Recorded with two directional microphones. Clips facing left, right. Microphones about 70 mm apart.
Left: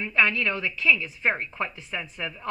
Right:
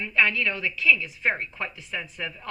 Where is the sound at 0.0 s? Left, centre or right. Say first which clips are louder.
Even; left.